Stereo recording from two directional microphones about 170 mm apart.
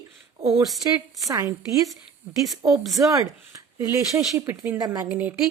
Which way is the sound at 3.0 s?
20° right (ahead or behind).